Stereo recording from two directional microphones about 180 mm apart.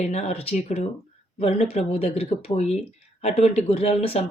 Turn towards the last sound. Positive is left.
turn(degrees=35)  # may be behind; listen again after turning